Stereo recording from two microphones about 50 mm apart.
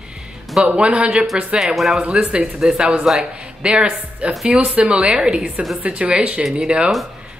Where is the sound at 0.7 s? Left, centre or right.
Right.